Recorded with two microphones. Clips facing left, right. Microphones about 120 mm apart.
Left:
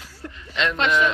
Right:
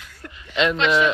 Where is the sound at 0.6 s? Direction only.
5° right (ahead or behind).